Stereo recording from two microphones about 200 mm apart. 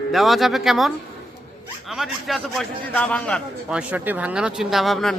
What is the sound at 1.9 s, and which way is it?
A man's voice, centre (ahead or behind).